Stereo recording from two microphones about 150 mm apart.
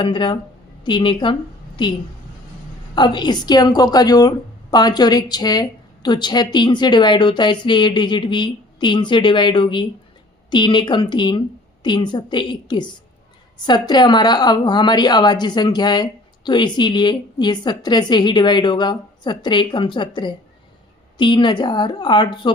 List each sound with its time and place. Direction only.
0.0 s a woman's voice: 30° left (ahead or behind)
2.9 s a woman's voice: 30° left (ahead or behind)